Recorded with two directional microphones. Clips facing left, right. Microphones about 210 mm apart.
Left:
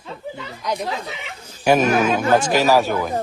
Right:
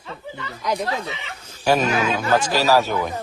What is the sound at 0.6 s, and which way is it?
Speech, centre (ahead or behind).